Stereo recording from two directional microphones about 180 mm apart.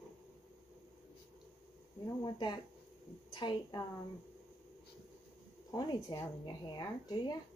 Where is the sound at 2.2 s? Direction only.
25° left (ahead or behind).